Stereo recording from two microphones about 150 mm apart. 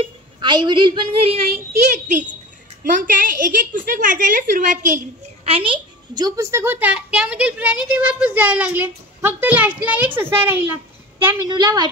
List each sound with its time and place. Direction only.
0.0 s a woman's voice: 30° right (ahead or behind); by 2.2 s 50° right (ahead or behind)
2.8 s a woman's voice: 65° right (ahead or behind)
5.5 s a child's voice: 35° right (ahead or behind); by 10.8 s 15° right (ahead or behind)
11.4 s a woman's voice: 30° right (ahead or behind)